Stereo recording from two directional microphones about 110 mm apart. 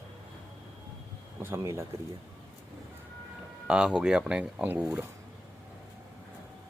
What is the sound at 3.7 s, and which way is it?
Speech, 5° right (ahead or behind).